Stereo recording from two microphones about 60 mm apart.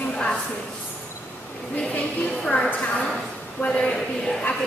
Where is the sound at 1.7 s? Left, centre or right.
Centre.